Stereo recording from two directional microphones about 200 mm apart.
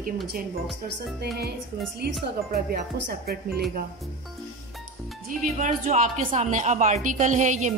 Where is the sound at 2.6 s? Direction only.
50° right (ahead or behind).